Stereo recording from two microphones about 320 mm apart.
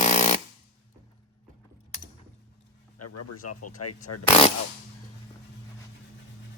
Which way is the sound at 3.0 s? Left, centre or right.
Left.